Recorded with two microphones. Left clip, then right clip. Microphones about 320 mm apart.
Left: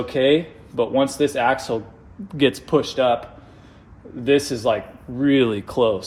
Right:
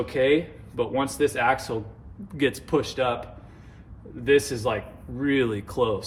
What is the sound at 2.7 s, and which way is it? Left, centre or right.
Speech, centre.